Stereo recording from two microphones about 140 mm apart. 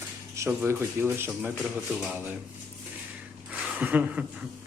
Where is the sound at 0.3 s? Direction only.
20° right (ahead or behind); by 2.1 s centre (ahead or behind).